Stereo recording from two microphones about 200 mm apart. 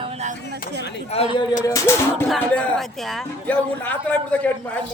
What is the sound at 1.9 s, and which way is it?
Speech, 15° left (ahead or behind).